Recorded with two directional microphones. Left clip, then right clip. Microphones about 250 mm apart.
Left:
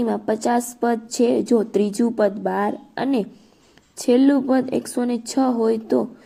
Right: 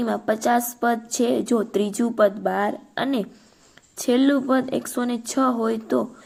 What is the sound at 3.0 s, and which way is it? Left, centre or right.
Speech, right.